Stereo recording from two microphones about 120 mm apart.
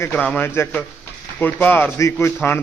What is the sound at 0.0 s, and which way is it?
A man's voice, 15° left (ahead or behind).